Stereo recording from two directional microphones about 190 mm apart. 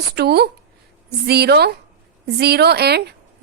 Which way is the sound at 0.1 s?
60° right (ahead or behind).